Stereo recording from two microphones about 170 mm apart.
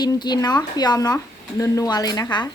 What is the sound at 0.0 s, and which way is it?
Speech, 25° left (ahead or behind).